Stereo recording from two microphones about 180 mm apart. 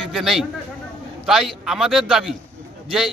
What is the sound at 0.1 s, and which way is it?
A man's voice, centre (ahead or behind).